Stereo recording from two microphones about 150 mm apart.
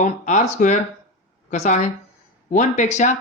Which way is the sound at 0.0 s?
55° left (ahead or behind).